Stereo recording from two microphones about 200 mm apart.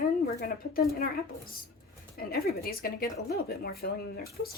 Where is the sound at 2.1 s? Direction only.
50° left (ahead or behind).